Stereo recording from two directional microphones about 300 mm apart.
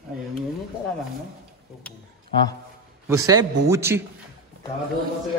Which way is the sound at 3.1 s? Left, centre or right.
Centre.